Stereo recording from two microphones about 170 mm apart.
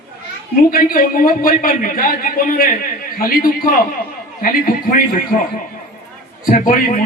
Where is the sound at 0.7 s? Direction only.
55° left (ahead or behind).